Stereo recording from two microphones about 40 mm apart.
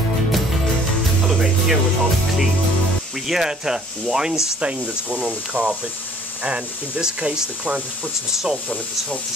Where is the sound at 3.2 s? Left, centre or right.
Centre.